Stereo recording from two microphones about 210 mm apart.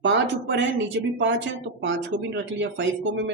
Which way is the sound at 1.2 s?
60° right (ahead or behind).